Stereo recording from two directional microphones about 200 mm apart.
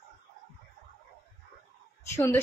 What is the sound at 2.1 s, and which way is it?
Speech, 15° left (ahead or behind).